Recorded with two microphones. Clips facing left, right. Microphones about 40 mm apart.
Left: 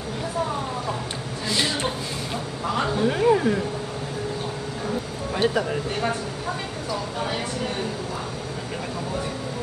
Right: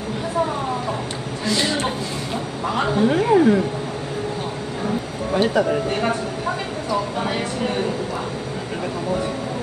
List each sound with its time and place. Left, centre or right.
2.7 s a woman's voice: centre
5.3 s speech: centre
5.9 s speech: right